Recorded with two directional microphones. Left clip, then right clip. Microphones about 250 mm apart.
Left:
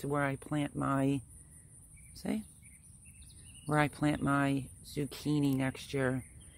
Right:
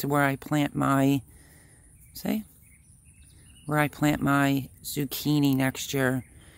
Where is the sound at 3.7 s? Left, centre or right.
Centre.